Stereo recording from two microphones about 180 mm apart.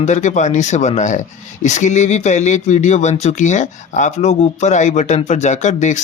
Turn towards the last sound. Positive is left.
turn(degrees=40)  # may be behind; listen again after turning